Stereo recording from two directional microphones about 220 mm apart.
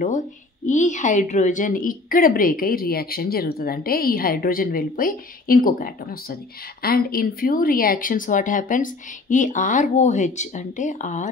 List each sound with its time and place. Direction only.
0.7 s a woman's voice: 35° left (ahead or behind)